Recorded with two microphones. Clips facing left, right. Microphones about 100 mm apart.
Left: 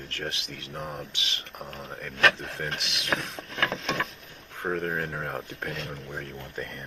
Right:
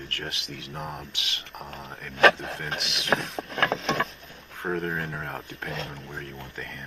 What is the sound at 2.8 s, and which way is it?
Speech, centre (ahead or behind).